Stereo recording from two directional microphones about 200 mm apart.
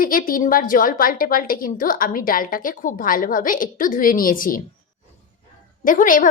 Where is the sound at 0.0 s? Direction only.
45° left (ahead or behind).